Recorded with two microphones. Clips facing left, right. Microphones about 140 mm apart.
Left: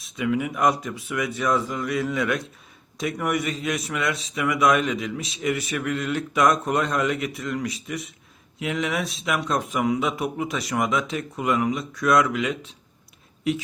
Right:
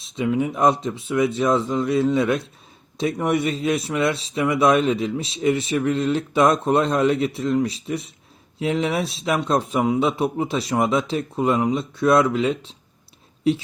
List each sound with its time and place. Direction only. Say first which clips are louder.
0.0 s a man's voice: right 3 dB; 25° right (ahead or behind)